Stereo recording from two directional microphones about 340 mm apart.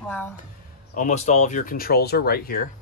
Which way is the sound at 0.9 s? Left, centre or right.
Left.